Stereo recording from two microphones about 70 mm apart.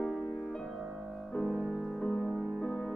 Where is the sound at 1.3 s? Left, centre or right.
Centre.